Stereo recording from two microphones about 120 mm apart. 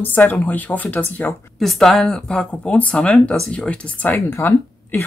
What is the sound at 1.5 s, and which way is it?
Speech, centre (ahead or behind).